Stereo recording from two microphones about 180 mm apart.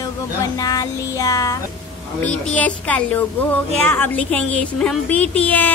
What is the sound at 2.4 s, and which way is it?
Speech, 10° left (ahead or behind).